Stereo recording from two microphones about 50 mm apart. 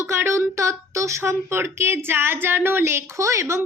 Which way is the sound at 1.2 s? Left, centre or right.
Right.